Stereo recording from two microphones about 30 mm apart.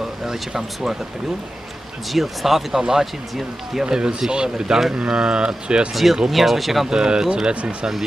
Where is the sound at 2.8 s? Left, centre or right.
Centre.